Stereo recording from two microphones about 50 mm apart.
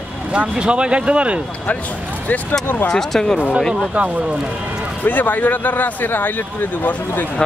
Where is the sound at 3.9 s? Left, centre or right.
Right.